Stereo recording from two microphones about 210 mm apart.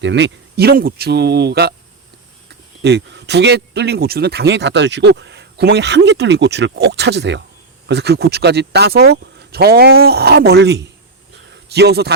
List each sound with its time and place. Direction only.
0.0 s speech: 55° right (ahead or behind)